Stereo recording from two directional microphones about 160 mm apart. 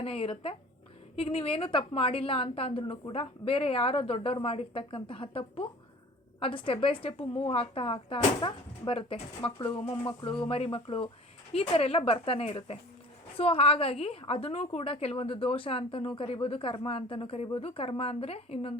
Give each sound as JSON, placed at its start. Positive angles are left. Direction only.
{"t": 0.0, "sound": "a woman's voice", "side_deg": 35}